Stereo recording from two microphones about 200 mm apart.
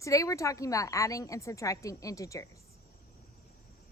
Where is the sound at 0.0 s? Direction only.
15° left (ahead or behind).